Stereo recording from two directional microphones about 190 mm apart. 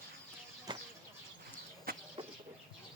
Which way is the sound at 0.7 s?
25° right (ahead or behind).